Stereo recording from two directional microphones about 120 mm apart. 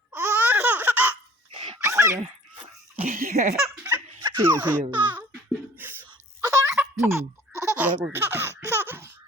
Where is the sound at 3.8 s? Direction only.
20° right (ahead or behind).